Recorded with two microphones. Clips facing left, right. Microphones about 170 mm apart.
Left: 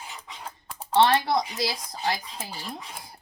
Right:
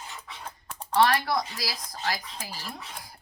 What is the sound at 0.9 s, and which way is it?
Speech, 25° left (ahead or behind).